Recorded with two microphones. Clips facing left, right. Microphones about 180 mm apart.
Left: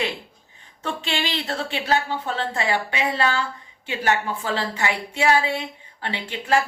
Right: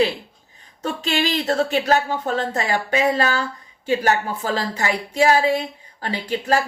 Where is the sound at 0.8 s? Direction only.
40° right (ahead or behind).